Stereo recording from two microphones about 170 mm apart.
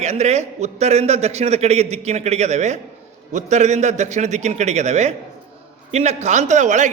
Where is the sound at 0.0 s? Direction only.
40° right (ahead or behind).